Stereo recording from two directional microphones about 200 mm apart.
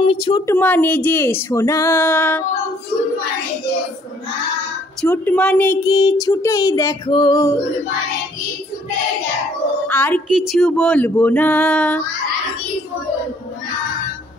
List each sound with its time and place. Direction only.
0.0 s speech: 25° left (ahead or behind)
0.5 s speech: 10° left (ahead or behind)
5.0 s speech: 10° left (ahead or behind)
9.8 s a woman's voice: 10° left (ahead or behind)